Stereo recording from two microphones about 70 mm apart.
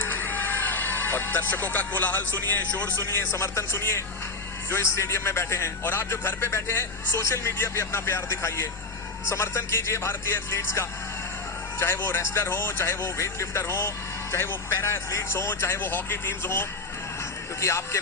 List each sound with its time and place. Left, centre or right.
0.0 s speech: left
3.1 s a man's voice: left